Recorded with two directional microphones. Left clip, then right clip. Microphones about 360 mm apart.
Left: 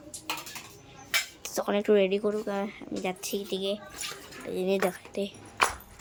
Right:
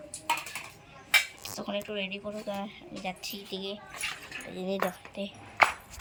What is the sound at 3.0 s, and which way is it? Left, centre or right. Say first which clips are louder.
A woman's voice: left 5 dB; centre.